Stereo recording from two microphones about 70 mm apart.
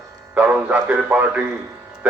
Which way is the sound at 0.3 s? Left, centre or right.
Right.